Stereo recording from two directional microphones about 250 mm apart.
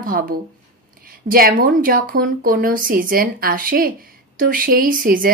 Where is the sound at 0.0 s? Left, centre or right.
Right.